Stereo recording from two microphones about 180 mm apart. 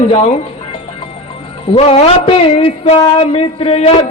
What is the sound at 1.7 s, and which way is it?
Speech, 35° left (ahead or behind).